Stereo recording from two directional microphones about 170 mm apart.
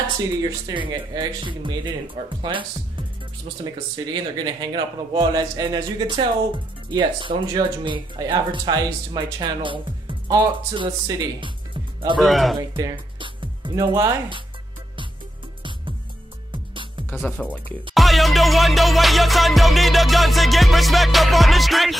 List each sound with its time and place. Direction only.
0.4 s speech: 25° right (ahead or behind)
12.2 s music: centre (ahead or behind)
12.5 s speech: 25° right (ahead or behind)
17.2 s speech: 10° left (ahead or behind)
17.9 s music: centre (ahead or behind)